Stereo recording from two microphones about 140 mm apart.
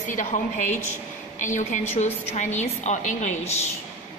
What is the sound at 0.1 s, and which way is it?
A woman's voice, 65° left (ahead or behind).